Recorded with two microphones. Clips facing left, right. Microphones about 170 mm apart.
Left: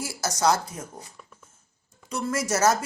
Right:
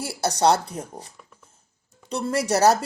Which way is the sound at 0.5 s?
65° right (ahead or behind).